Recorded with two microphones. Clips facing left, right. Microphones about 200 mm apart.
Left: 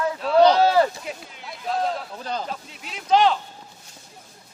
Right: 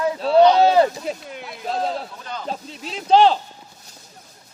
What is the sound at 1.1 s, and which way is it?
Speech, 30° right (ahead or behind).